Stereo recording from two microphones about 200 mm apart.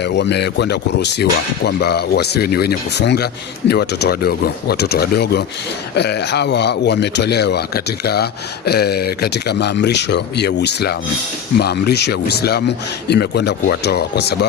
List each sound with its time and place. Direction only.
0.0 s speech: 60° left (ahead or behind)